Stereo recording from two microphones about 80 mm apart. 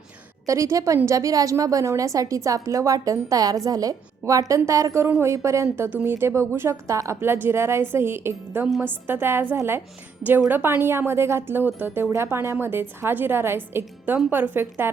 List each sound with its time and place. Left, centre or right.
0.4 s a woman's voice: right
5.9 s a woman's voice: right
7.2 s a woman's voice: right